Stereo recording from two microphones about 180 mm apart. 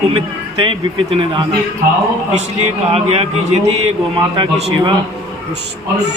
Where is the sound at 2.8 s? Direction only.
35° right (ahead or behind).